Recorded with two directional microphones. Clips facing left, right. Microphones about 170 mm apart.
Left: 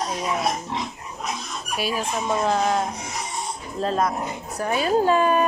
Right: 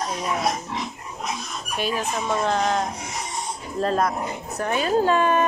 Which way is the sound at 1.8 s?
10° left (ahead or behind).